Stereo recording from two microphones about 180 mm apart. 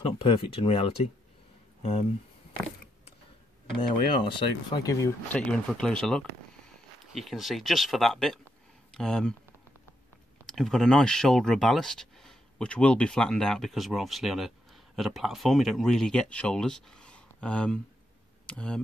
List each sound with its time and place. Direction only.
0.0 s speech: 30° left (ahead or behind)
3.8 s speech: 25° left (ahead or behind)
5.3 s speech: 5° left (ahead or behind)
10.4 s speech: centre (ahead or behind)